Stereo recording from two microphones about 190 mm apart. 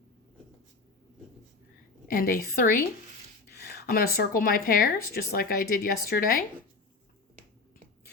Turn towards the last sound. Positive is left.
turn(degrees=50)  # may be behind; listen again after turning